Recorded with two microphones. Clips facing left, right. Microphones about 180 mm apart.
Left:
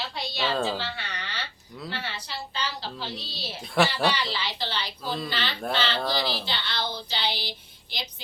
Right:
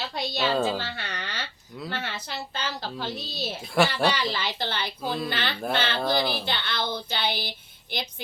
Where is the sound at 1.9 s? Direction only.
50° right (ahead or behind).